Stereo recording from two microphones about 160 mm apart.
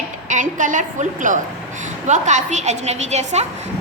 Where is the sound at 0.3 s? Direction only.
50° right (ahead or behind).